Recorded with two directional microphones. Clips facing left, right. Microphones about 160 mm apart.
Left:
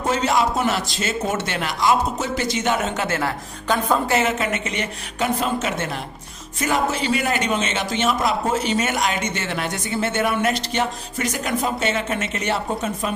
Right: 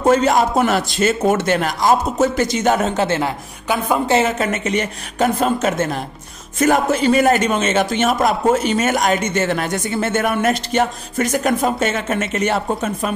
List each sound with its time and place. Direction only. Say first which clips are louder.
0.0 s a man's voice: right 6 dB; 50° right (ahead or behind)
3.1 s a woman's voice: right 4 dB; 20° right (ahead or behind)
3.6 s a woman's voice: right 1 dB; 10° right (ahead or behind)
4.1 s speech: right 4 dB; 30° right (ahead or behind)
4.5 s a man's voice: right 5 dB; 45° right (ahead or behind)